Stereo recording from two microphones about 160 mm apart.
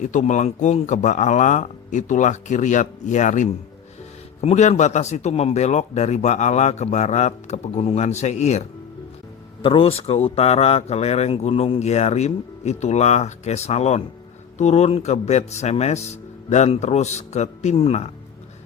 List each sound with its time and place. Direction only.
0.0 s speech: 50° left (ahead or behind)
9.6 s speech: 35° left (ahead or behind)